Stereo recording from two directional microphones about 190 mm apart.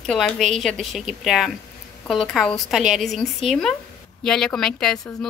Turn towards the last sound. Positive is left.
turn(degrees=0)  # may be behind; listen again after turning